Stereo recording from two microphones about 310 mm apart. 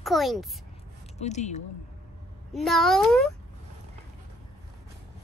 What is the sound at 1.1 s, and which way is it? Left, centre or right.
Speech, left.